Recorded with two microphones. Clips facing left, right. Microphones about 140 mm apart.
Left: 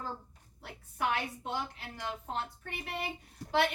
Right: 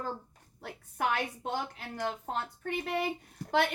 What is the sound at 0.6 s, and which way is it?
A child's voice, 50° right (ahead or behind).